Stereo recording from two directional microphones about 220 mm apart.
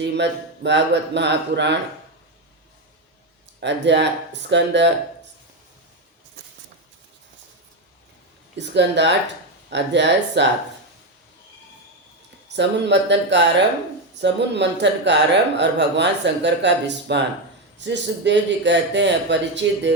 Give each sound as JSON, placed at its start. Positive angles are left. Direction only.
{"t": 0.0, "sound": "speech", "side_deg": -50}
{"t": 3.6, "sound": "speech", "side_deg": -55}
{"t": 8.5, "sound": "speech", "side_deg": -50}
{"t": 12.5, "sound": "speech", "side_deg": -55}